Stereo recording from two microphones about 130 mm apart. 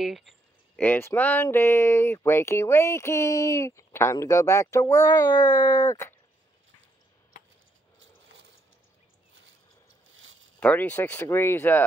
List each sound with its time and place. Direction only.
0.0 s speech: centre (ahead or behind)
0.7 s speech: 15° left (ahead or behind); by 5.9 s 30° left (ahead or behind)
5.9 s speech: 15° left (ahead or behind)
10.6 s speech: 10° left (ahead or behind)